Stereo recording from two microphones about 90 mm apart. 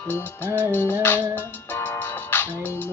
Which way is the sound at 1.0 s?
20° left (ahead or behind).